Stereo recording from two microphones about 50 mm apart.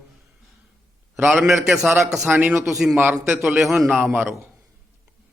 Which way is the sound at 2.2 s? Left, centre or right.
Right.